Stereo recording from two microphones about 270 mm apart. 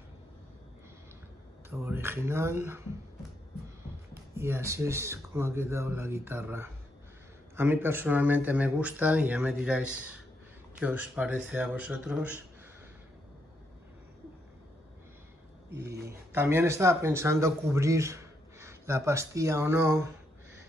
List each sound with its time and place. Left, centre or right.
1.7 s speech: centre
15.7 s speech: right
16.1 s speech: centre